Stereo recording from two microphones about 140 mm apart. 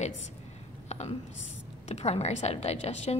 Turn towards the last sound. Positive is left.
turn(degrees=50)  # may be behind; listen again after turning